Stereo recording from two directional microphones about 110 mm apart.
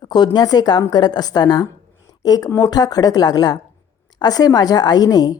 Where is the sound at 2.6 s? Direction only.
35° left (ahead or behind).